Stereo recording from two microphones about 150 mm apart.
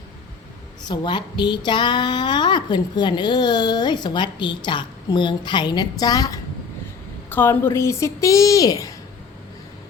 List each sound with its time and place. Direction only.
0.9 s speech: 30° left (ahead or behind)
7.3 s a woman's voice: 15° left (ahead or behind)